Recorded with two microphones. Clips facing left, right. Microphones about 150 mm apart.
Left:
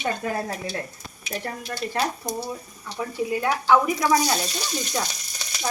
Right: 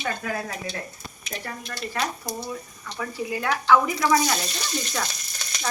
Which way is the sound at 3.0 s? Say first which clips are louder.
Left 3 dB; 20° left (ahead or behind).